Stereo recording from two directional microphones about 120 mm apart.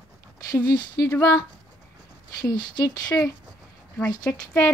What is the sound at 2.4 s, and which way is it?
Speech, 35° left (ahead or behind).